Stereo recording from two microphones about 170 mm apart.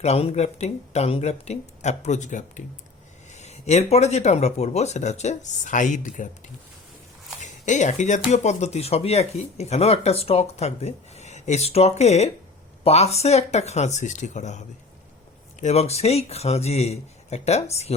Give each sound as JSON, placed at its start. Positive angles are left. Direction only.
{"t": 0.0, "sound": "speech", "side_deg": 35}
{"t": 7.4, "sound": "speech", "side_deg": 45}
{"t": 15.6, "sound": "speech", "side_deg": 40}